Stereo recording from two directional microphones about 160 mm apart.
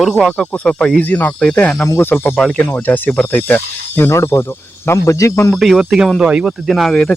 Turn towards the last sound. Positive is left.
turn(degrees=5)  # may be behind; listen again after turning